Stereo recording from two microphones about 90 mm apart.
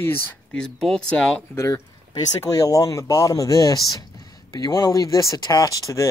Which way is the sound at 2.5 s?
40° left (ahead or behind).